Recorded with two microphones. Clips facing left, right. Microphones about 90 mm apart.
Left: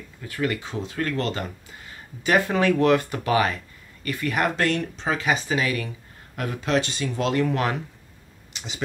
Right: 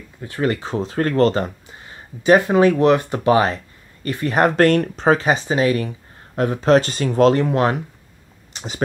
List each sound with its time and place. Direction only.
0.2 s speech: 35° right (ahead or behind)
1.7 s speech: 30° right (ahead or behind)
7.4 s speech: 30° right (ahead or behind)
8.5 s speech: 45° right (ahead or behind)